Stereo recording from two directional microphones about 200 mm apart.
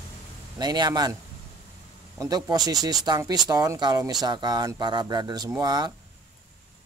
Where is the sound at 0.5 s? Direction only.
20° right (ahead or behind).